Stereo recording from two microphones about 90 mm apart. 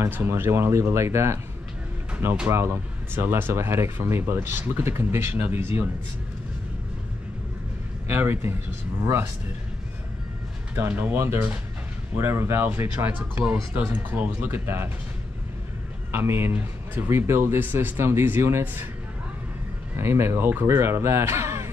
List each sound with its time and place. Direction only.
0.0 s speech: 25° right (ahead or behind)
2.5 s speech: 30° right (ahead or behind)
8.1 s speech: 25° right (ahead or behind)
10.7 s speech: 25° right (ahead or behind)
16.1 s speech: 25° right (ahead or behind)
20.0 s speech: 30° right (ahead or behind)